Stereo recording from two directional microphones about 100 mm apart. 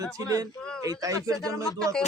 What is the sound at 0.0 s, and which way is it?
Speech, 35° right (ahead or behind).